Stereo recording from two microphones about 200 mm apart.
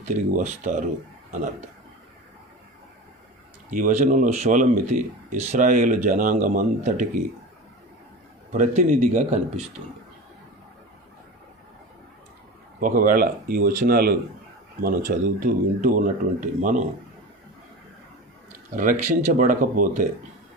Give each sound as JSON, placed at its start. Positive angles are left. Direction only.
{"t": 0.0, "sound": "speech", "side_deg": -40}
{"t": 3.7, "sound": "speech", "side_deg": -40}
{"t": 8.5, "sound": "speech", "side_deg": -40}
{"t": 12.8, "sound": "speech", "side_deg": -45}
{"t": 19.4, "sound": "speech", "side_deg": -40}